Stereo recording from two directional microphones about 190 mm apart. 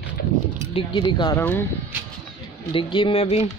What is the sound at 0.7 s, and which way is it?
Speech, 25° left (ahead or behind).